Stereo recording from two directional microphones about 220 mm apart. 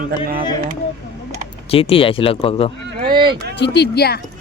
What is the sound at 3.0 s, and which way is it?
Speech, 20° right (ahead or behind).